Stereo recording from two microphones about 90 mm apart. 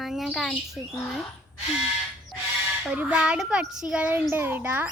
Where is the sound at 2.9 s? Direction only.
15° right (ahead or behind).